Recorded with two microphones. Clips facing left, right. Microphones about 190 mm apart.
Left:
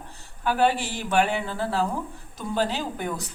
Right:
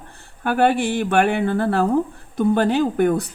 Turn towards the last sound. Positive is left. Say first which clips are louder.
# right 12 dB
turn(degrees=-55)  # may be behind; listen again after turning